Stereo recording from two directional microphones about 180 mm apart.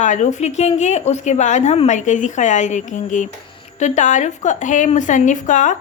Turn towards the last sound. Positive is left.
turn(degrees=45)  # may be behind; listen again after turning